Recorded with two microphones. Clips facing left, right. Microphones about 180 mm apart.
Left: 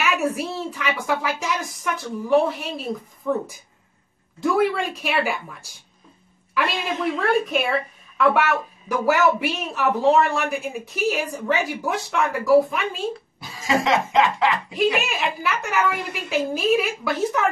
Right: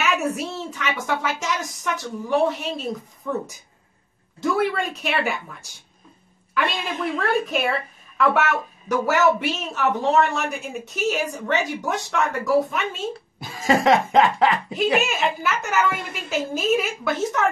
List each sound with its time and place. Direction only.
0.0 s speech: centre (ahead or behind)
7.2 s speech: centre (ahead or behind)
13.4 s music: 50° right (ahead or behind)
15.0 s speech: centre (ahead or behind)